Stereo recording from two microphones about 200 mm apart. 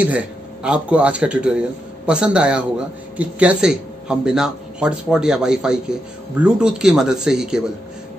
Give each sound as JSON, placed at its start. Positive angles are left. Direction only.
{"t": 0.0, "sound": "speech", "side_deg": -5}